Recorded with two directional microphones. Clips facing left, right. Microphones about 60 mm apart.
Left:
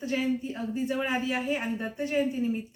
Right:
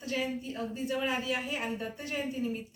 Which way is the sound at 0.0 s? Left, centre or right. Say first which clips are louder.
Left 5 dB; left.